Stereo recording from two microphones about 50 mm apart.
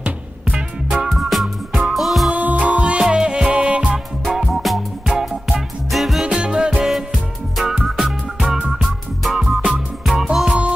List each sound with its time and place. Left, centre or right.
0.0 s music: right
1.0 s music: centre
2.3 s music: right
3.1 s music: centre
3.9 s music: centre
6.2 s music: right; by 10.6 s centre